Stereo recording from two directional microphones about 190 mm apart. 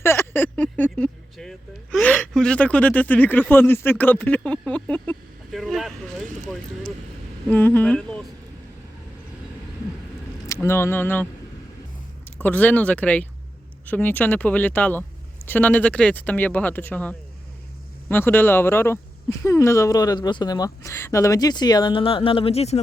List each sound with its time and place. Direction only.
0.0 s a sound: 10° left (ahead or behind)
7.4 s speech: 10° left (ahead or behind)
10.4 s speech: 15° left (ahead or behind)
12.4 s speech: 10° left (ahead or behind); by 22.8 s 35° left (ahead or behind)